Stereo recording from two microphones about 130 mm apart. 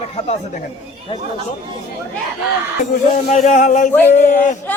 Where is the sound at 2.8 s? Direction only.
75° left (ahead or behind).